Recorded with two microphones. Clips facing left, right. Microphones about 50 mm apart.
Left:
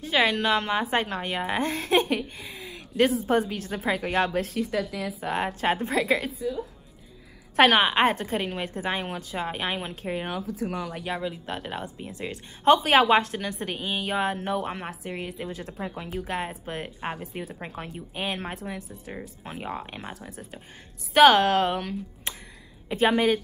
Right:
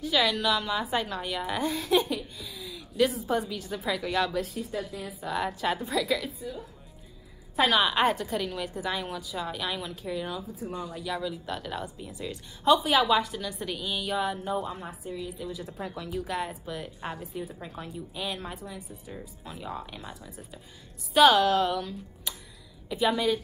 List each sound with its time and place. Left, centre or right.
0.0 s a woman's voice: left
5.2 s a woman's voice: left
7.7 s a woman's voice: left
10.5 s speech: left
11.1 s a woman's voice: left
16.1 s a woman's voice: left